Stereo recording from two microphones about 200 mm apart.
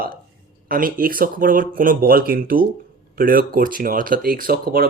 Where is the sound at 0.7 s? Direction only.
45° right (ahead or behind).